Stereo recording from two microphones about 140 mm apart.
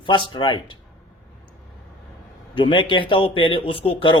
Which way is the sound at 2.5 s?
35° left (ahead or behind).